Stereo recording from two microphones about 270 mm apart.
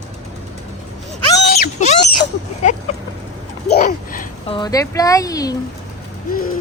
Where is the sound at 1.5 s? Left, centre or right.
Left.